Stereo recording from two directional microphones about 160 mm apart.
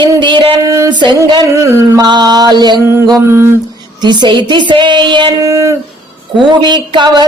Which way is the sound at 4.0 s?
30° right (ahead or behind).